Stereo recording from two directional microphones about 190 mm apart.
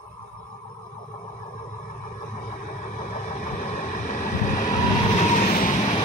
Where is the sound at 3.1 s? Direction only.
40° left (ahead or behind).